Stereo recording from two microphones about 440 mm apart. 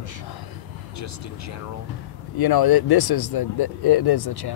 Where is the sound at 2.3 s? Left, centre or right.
Left.